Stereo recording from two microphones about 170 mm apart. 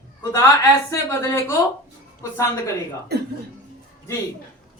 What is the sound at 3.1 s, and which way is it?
Speech, 75° right (ahead or behind).